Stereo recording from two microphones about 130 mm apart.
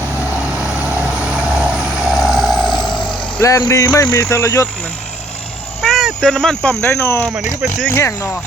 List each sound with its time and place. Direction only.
0.5 s vehicle: 10° right (ahead or behind)
3.7 s speech: 25° left (ahead or behind)
5.8 s speech: centre (ahead or behind)
6.9 s speech: 20° left (ahead or behind)